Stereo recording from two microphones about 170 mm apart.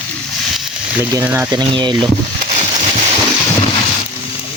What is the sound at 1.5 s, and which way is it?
Speech, 25° right (ahead or behind).